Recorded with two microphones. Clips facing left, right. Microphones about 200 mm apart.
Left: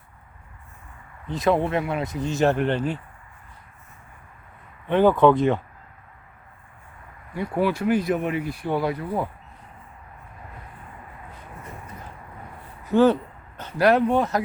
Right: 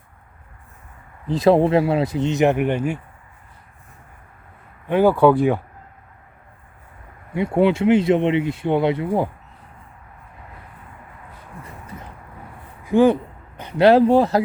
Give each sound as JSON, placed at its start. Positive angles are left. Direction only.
{"t": 1.3, "sound": "speech", "side_deg": -30}
{"t": 4.9, "sound": "speech", "side_deg": -10}
{"t": 7.3, "sound": "speech", "side_deg": -25}
{"t": 12.8, "sound": "a sound", "side_deg": -10}
{"t": 13.8, "sound": "speech", "side_deg": -30}